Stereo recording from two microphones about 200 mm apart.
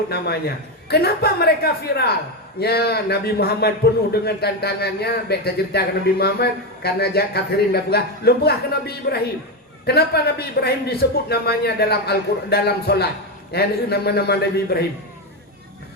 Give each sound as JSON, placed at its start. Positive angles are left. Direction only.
{"t": 0.1, "sound": "a man's voice", "side_deg": 50}